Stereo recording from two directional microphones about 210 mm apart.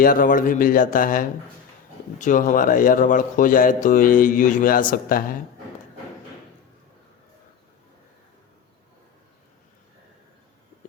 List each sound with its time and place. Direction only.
0.0 s speech: 40° left (ahead or behind)